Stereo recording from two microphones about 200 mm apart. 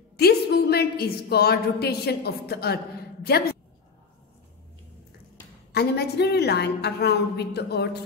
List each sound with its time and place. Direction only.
0.2 s a woman's voice: 50° left (ahead or behind)
5.7 s a woman's voice: 55° left (ahead or behind)